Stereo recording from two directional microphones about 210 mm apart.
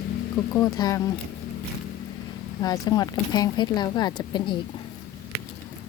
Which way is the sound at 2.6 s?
20° left (ahead or behind).